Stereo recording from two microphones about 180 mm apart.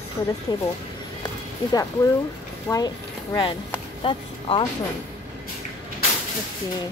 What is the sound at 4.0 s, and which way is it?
Speech, 30° left (ahead or behind).